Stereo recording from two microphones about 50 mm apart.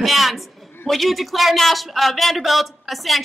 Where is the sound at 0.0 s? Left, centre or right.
Centre.